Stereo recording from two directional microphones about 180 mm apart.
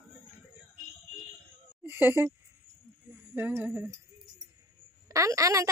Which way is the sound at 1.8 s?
10° right (ahead or behind).